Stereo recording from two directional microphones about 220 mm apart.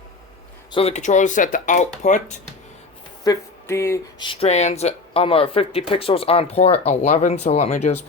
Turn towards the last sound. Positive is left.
turn(degrees=30)  # may be behind; listen again after turning